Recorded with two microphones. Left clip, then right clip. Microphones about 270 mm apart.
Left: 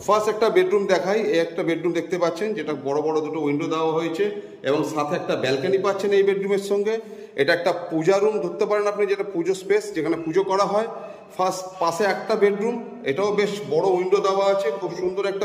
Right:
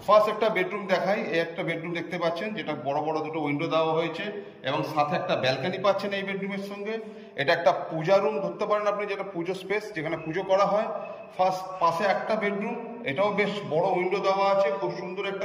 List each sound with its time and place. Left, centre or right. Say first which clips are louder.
0.0 s a man's voice: left 1 dB; centre